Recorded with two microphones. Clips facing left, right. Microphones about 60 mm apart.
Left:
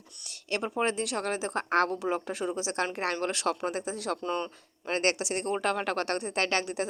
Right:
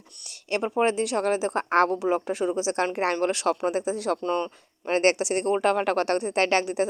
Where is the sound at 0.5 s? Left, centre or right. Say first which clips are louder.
Right 6 dB; right.